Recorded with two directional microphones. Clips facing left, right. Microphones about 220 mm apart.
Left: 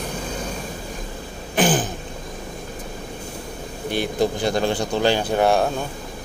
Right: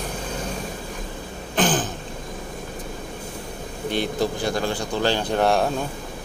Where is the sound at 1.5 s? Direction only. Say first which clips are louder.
Left 2 dB; 10° left (ahead or behind).